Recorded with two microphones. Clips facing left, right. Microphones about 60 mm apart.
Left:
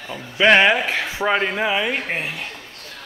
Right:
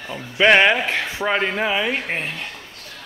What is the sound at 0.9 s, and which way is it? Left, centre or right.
Speech, centre.